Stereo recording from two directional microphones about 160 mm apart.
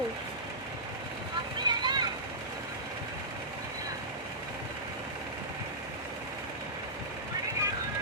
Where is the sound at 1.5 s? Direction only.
30° right (ahead or behind).